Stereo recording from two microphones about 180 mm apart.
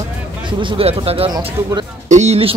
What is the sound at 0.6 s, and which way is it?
Speech, 35° right (ahead or behind).